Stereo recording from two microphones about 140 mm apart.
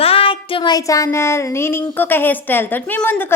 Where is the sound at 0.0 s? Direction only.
40° left (ahead or behind); by 1.8 s 20° left (ahead or behind).